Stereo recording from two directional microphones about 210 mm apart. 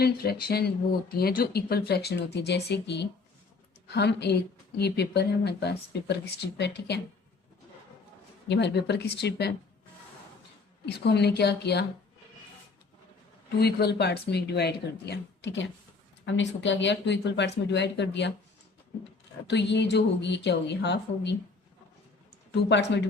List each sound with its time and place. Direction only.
0.0 s speech: 50° left (ahead or behind)
8.4 s speech: 55° left (ahead or behind)
10.8 s speech: 50° left (ahead or behind)
13.6 s speech: 50° left (ahead or behind)
19.5 s speech: 55° left (ahead or behind)